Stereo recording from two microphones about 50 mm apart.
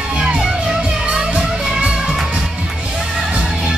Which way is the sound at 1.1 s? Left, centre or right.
Centre.